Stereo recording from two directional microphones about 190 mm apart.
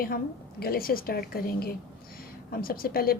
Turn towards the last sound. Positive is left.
turn(degrees=50)  # may be behind; listen again after turning